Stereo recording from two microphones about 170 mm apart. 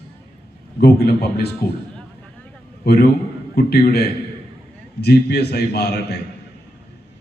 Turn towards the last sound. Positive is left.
turn(degrees=75)  # may be behind; listen again after turning